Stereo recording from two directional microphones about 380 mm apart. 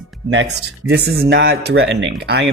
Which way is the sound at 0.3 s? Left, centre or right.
Right.